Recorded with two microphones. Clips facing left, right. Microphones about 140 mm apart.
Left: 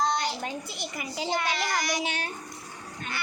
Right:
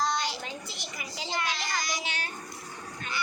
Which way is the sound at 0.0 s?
50° left (ahead or behind).